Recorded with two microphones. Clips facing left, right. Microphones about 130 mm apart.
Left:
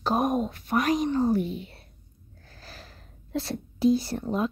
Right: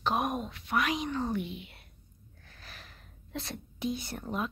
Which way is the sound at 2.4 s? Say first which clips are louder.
Left 5 dB; 35° left (ahead or behind).